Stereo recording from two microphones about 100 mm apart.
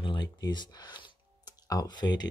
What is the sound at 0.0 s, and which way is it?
Speech, 50° left (ahead or behind).